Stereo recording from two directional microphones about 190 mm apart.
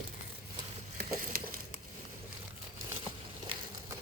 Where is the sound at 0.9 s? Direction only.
50° right (ahead or behind).